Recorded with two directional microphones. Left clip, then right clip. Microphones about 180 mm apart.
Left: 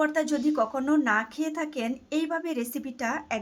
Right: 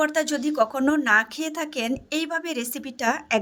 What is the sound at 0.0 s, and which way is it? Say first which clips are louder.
A woman's voice: right 2 dB; 40° right (ahead or behind).